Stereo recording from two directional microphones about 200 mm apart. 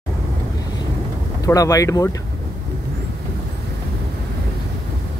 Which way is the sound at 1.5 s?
15° left (ahead or behind).